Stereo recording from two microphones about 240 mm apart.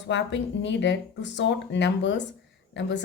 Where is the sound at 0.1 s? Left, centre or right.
Left.